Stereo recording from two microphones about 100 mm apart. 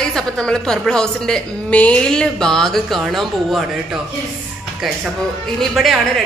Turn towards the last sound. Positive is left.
turn(degrees=-5)  # may be behind; listen again after turning